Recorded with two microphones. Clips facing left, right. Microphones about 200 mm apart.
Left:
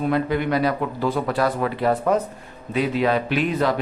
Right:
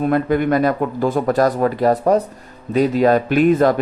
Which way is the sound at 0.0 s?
50° right (ahead or behind).